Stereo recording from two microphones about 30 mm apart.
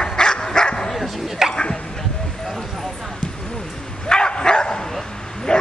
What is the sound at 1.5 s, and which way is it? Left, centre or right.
Bow-wow, left.